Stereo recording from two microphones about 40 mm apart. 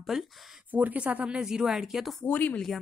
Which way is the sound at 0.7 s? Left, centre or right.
Right.